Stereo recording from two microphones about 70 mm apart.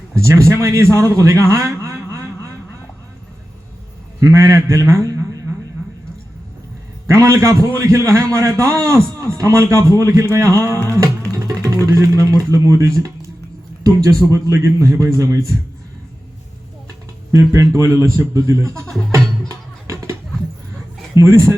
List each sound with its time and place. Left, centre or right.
0.2 s a man's voice: right
4.2 s a man's voice: right
7.1 s a man's voice: right
10.8 s music: right
11.9 s a man's voice: right
17.3 s a man's voice: right
19.1 s music: right
21.2 s a man's voice: right